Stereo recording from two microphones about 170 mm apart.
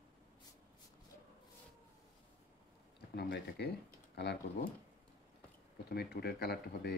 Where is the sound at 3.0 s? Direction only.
85° left.